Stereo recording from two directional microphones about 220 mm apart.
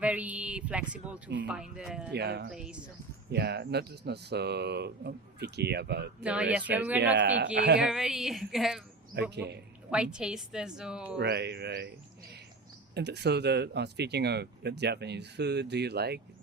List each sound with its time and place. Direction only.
0.0 s a woman's voice: 5° right (ahead or behind)
2.1 s speech: 50° right (ahead or behind)
2.5 s a woman's voice: 5° right (ahead or behind)
3.3 s speech: 50° right (ahead or behind)
6.2 s speech: 5° right (ahead or behind)
7.0 s speech: 55° right (ahead or behind)
7.8 s a woman's voice: 5° right (ahead or behind)
9.3 s speech: 50° right (ahead or behind)
9.9 s a woman's voice: 5° right (ahead or behind)
11.2 s speech: 50° right (ahead or behind)
12.9 s speech: 50° right (ahead or behind)